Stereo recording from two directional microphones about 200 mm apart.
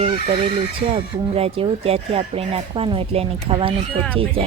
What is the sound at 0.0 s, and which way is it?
Speech, 25° right (ahead or behind).